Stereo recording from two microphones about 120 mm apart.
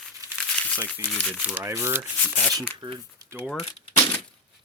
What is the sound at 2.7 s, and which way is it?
Speech, 45° right (ahead or behind).